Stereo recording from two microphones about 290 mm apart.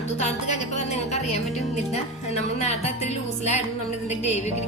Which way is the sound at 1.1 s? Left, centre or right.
Left.